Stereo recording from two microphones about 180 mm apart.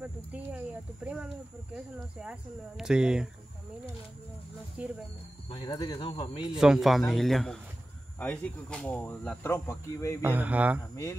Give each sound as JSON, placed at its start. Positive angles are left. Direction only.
{"t": 0.0, "sound": "speech", "side_deg": -10}
{"t": 4.8, "sound": "speech", "side_deg": -5}
{"t": 5.5, "sound": "speech", "side_deg": 25}
{"t": 6.5, "sound": "speech", "side_deg": -5}
{"t": 10.2, "sound": "speech", "side_deg": -10}